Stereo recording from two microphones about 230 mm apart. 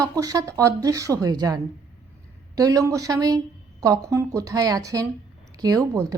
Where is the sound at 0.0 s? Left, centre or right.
Centre.